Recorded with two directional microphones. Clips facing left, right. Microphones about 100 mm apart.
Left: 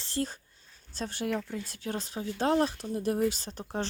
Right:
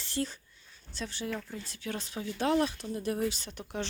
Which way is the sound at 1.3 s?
75° left (ahead or behind).